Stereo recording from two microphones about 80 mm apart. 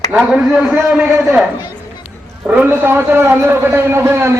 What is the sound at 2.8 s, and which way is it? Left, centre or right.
A man's voice, right.